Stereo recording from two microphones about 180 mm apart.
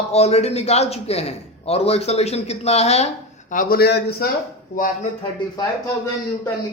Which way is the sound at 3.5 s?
50° left (ahead or behind).